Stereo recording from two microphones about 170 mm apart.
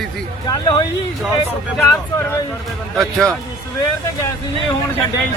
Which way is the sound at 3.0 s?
Centre (ahead or behind).